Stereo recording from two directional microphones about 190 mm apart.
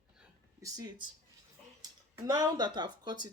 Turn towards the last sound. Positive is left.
turn(degrees=-25)  # may be behind; listen again after turning